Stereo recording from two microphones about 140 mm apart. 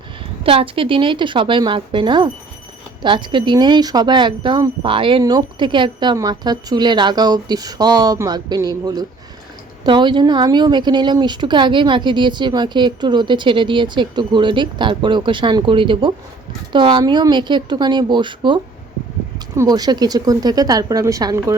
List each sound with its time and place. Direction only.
0.2 s a woman's voice: 40° right (ahead or behind); by 21.5 s 25° right (ahead or behind)